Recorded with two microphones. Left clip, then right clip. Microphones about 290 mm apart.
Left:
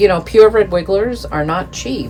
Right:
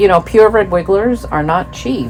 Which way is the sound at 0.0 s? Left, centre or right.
Centre.